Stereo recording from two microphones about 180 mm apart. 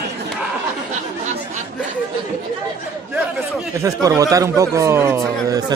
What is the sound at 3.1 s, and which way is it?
Speech, 15° right (ahead or behind).